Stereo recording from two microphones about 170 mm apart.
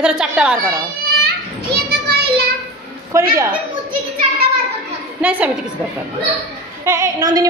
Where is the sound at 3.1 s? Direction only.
15° right (ahead or behind).